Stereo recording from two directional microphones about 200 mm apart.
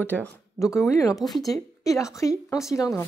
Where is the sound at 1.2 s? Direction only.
Centre (ahead or behind).